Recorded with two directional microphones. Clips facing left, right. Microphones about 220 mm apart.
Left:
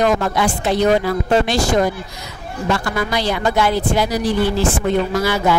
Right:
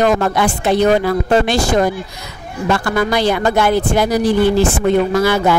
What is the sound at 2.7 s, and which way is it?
Speech, 55° right (ahead or behind).